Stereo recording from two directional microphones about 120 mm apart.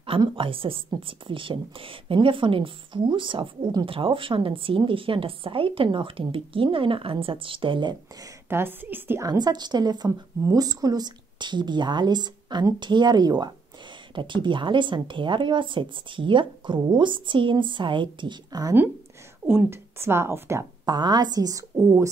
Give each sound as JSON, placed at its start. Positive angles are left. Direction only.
{"t": 0.2, "sound": "speech", "side_deg": -45}
{"t": 8.5, "sound": "a woman's voice", "side_deg": -20}
{"t": 9.2, "sound": "a woman's voice", "side_deg": -35}
{"t": 19.4, "sound": "speech", "side_deg": -20}
{"t": 20.8, "sound": "a woman's voice", "side_deg": -35}